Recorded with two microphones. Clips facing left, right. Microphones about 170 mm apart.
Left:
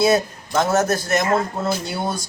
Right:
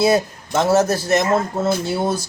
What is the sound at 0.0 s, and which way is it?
A man's voice, 30° right (ahead or behind).